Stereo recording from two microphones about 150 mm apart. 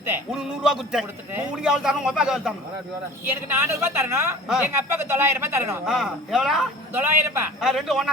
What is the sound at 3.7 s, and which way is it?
Speech, 20° right (ahead or behind).